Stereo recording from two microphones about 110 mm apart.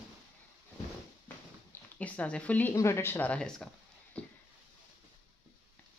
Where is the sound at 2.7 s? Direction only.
25° left (ahead or behind).